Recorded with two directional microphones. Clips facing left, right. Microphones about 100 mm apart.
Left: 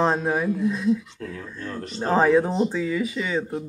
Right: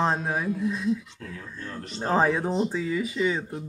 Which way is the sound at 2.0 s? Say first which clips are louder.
Left 5 dB; 5° right (ahead or behind).